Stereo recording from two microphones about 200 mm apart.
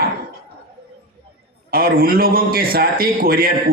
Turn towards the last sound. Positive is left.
turn(degrees=-45)  # may be behind; listen again after turning